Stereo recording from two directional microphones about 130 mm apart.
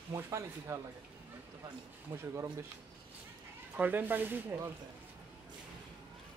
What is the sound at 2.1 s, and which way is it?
Speech, 20° right (ahead or behind).